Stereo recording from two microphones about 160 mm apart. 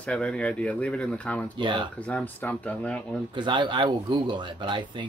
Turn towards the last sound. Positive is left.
turn(degrees=-30)  # may be behind; listen again after turning